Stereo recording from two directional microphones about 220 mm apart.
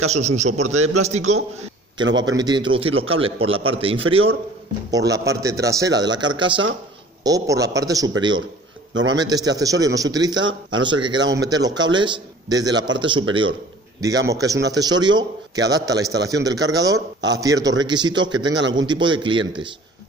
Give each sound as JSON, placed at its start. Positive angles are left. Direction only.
{"t": 0.0, "sound": "a man's voice", "side_deg": -30}
{"t": 2.1, "sound": "a man's voice", "side_deg": -20}
{"t": 8.9, "sound": "a man's voice", "side_deg": -60}
{"t": 9.2, "sound": "a man's voice", "side_deg": -15}
{"t": 18.6, "sound": "a man's voice", "side_deg": -55}
{"t": 18.9, "sound": "a man's voice", "side_deg": -20}